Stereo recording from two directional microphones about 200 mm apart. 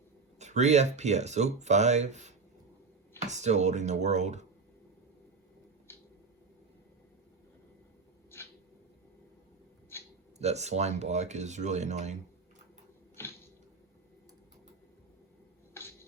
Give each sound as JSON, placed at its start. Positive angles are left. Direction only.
{"t": 0.3, "sound": "speech", "side_deg": -35}
{"t": 10.3, "sound": "speech", "side_deg": -35}